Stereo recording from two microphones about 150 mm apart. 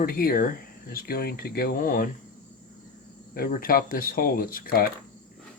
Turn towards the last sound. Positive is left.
turn(degrees=75)  # may be behind; listen again after turning